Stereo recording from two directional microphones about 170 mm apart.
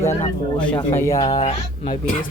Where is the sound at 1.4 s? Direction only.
35° left (ahead or behind).